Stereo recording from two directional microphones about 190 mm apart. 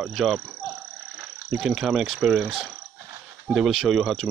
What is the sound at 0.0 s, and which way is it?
Speech, centre (ahead or behind).